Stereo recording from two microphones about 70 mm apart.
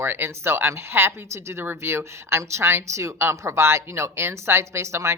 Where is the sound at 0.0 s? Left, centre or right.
Right.